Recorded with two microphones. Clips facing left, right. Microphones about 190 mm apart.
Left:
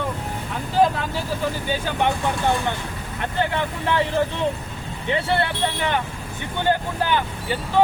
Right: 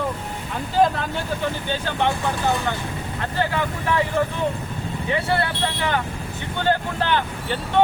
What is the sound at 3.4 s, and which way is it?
Speech, 25° left (ahead or behind).